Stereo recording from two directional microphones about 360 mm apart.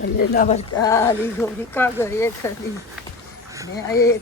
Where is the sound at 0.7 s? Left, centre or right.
Centre.